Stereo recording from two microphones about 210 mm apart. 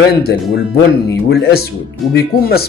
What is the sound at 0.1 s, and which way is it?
Speech, 50° left (ahead or behind).